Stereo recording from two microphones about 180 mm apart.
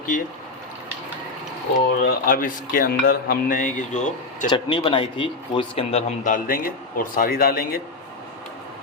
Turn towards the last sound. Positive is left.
turn(degrees=55)  # may be behind; listen again after turning